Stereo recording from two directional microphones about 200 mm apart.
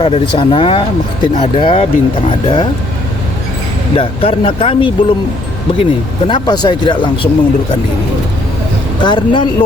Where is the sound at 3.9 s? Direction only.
25° left (ahead or behind).